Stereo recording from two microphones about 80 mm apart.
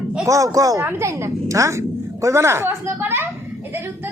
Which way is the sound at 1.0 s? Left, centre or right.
Right.